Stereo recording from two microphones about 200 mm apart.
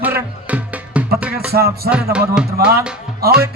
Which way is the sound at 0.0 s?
10° right (ahead or behind).